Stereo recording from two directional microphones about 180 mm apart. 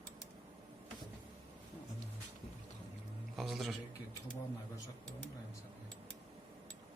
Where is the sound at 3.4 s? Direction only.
Centre (ahead or behind).